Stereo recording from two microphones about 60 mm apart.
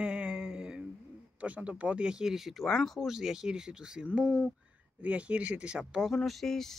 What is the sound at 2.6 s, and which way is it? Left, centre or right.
Speech, centre.